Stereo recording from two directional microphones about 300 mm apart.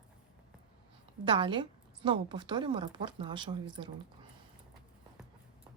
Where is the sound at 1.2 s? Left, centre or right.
Centre.